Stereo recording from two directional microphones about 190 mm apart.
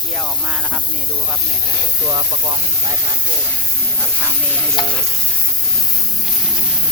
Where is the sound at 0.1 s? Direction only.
Centre (ahead or behind).